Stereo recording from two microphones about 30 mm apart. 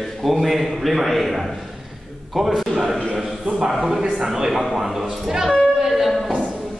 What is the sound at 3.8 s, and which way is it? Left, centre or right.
A man's voice, centre.